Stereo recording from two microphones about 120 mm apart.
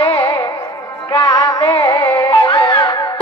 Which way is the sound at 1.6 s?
50° left (ahead or behind).